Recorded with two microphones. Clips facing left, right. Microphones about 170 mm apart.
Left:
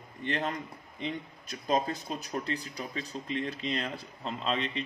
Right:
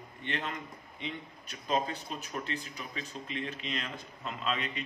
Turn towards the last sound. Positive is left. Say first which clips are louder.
# left 3 dB
turn(degrees=30)  # may be behind; listen again after turning